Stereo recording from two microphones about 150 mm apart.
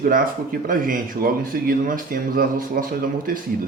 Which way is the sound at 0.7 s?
70° right (ahead or behind).